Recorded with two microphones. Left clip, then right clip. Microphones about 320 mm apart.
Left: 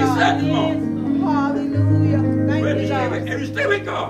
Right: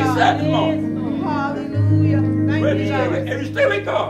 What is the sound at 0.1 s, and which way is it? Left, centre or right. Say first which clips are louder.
Music: right 1 dB; centre.